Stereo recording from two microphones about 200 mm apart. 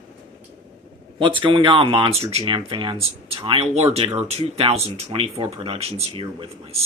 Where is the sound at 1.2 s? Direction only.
25° right (ahead or behind).